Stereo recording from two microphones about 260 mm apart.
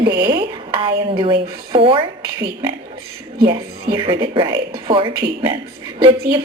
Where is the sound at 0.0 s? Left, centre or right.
Centre.